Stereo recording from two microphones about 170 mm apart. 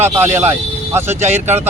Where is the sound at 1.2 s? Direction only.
40° right (ahead or behind).